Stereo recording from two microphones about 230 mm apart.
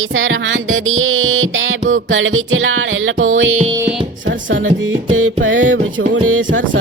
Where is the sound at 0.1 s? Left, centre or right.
Right.